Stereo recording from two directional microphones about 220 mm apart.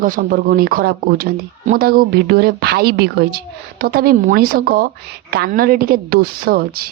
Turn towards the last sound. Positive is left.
turn(degrees=-45)  # may be behind; listen again after turning